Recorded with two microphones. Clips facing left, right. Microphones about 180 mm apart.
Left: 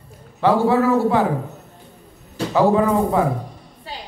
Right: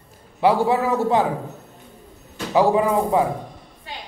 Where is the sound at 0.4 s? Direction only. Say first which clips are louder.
Left 2 dB; 15° right (ahead or behind).